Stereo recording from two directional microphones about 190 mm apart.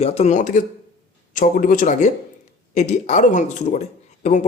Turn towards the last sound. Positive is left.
turn(degrees=35)  # may be behind; listen again after turning